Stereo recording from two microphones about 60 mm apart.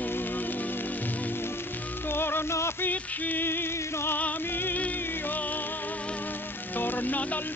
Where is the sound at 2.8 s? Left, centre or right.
Left.